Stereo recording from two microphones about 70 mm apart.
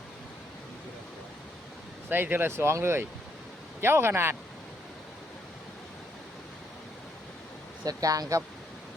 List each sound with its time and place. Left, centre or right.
2.0 s speech: right
7.9 s speech: right